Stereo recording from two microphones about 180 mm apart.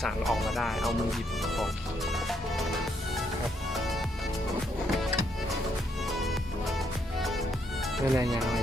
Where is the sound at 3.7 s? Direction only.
Centre (ahead or behind).